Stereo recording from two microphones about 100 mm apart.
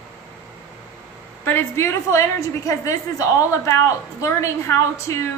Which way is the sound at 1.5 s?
25° left (ahead or behind).